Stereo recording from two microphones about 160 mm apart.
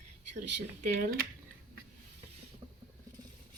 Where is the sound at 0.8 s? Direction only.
65° right (ahead or behind).